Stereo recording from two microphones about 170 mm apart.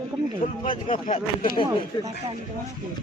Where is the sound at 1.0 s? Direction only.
55° left (ahead or behind).